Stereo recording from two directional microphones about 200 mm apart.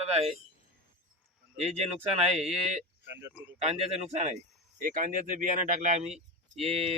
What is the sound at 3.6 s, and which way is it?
Speech, 35° right (ahead or behind).